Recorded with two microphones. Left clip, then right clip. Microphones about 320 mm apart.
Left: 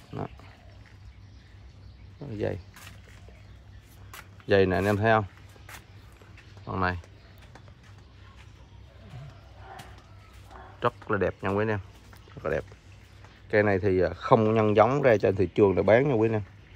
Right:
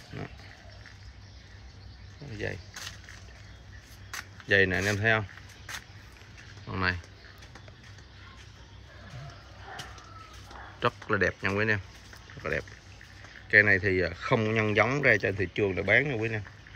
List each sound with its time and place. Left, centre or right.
4.5 s speech: centre
6.6 s speech: centre
10.8 s speech: centre
16.2 s speech: left